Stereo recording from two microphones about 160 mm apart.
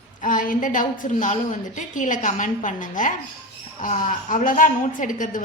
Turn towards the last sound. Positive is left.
turn(degrees=55)  # may be behind; listen again after turning